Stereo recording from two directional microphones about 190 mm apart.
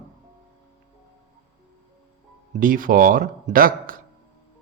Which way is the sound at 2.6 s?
45° right (ahead or behind).